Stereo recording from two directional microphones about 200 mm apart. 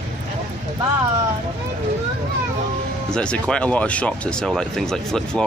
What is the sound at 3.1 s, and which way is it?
Speech, 5° left (ahead or behind).